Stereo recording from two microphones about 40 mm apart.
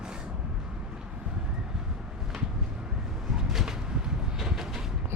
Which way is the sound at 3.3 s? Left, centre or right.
Centre.